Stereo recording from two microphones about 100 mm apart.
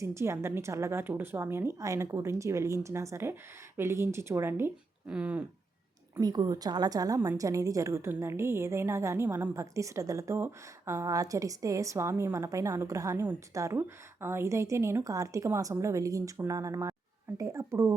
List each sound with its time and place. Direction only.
0.0 s a woman's voice: 30° right (ahead or behind)
5.0 s speech: 10° right (ahead or behind)
6.1 s a woman's voice: 40° right (ahead or behind)
13.7 s a woman's voice: 20° right (ahead or behind)